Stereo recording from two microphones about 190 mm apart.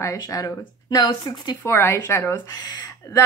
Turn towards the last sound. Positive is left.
turn(degrees=20)  # may be behind; listen again after turning